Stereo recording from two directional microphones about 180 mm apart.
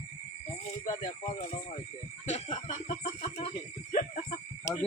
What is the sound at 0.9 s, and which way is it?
Speech, 20° left (ahead or behind).